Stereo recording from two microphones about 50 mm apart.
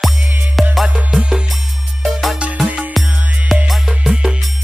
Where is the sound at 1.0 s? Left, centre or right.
Centre.